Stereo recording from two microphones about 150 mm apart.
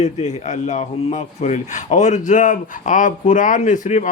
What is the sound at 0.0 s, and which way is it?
A man's voice, 50° left (ahead or behind).